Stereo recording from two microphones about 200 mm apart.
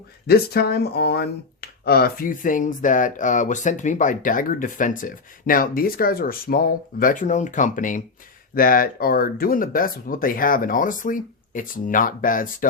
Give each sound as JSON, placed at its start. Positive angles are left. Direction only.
{"t": 0.3, "sound": "speech", "side_deg": 50}